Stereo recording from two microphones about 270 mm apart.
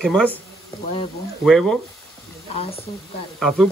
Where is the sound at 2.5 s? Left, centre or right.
Left.